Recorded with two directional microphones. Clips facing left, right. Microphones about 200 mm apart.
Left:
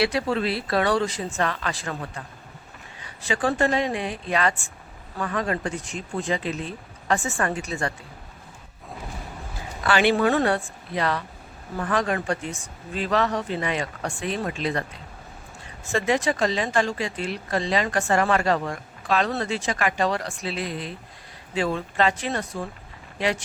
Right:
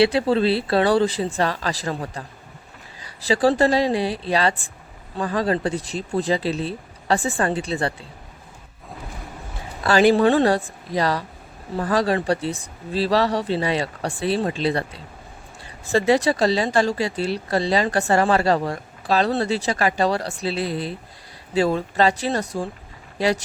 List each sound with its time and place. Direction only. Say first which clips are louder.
0.0 s speech: right 6 dB; 30° right (ahead or behind)
9.8 s speech: right 5 dB; 40° right (ahead or behind)
15.9 s speech: right 5 dB; 35° right (ahead or behind)